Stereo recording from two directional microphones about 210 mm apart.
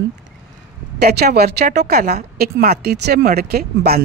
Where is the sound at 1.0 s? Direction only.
50° right (ahead or behind).